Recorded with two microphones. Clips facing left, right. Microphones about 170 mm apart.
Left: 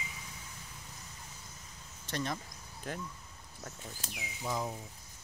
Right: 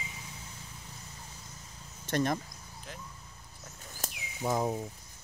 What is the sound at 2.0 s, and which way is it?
Speech, 50° right (ahead or behind).